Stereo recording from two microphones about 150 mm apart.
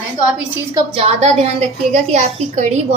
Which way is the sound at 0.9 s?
40° right (ahead or behind).